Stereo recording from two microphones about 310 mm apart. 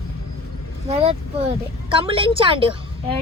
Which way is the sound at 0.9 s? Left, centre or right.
Centre.